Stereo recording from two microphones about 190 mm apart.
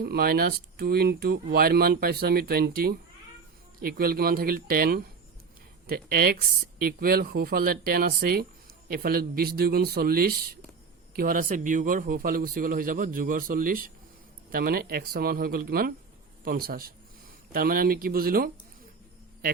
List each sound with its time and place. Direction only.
0.0 s speech: 55° right (ahead or behind)